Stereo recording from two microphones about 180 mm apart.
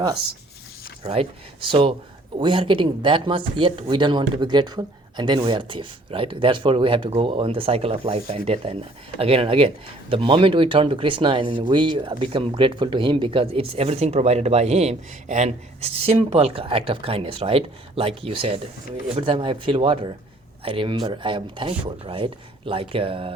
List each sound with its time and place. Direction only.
1.0 s speech: 35° right (ahead or behind)